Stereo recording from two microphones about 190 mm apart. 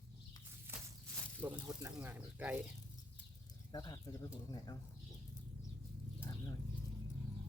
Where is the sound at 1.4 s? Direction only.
10° right (ahead or behind).